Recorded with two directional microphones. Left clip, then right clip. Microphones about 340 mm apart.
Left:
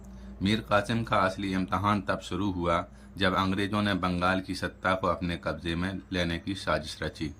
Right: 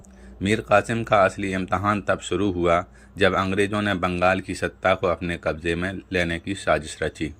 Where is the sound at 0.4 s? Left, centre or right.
Centre.